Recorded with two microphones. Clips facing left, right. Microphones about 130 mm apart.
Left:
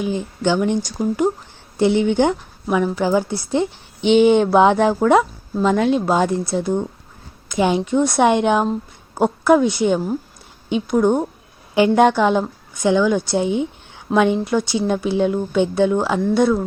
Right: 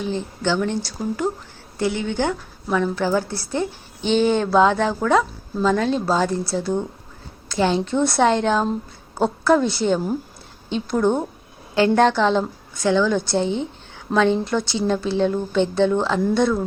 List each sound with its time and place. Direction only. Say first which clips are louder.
0.0 s a woman's voice: left 3 dB; 15° left (ahead or behind)